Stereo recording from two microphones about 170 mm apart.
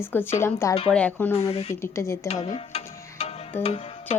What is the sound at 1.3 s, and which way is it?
Speech, 35° left (ahead or behind).